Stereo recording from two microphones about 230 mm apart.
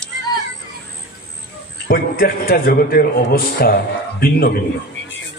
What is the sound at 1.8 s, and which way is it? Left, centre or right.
A man's voice, left.